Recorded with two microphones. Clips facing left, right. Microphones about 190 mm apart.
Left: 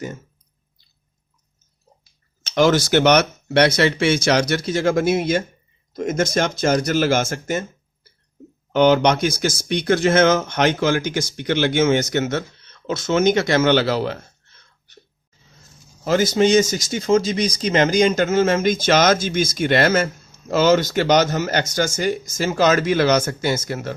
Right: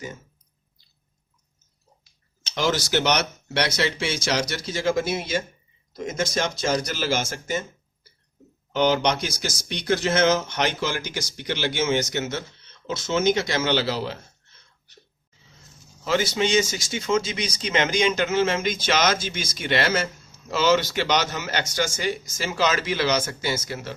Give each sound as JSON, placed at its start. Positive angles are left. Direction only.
{"t": 2.4, "sound": "speech", "side_deg": 55}
{"t": 8.7, "sound": "speech", "side_deg": 55}
{"t": 16.0, "sound": "speech", "side_deg": 40}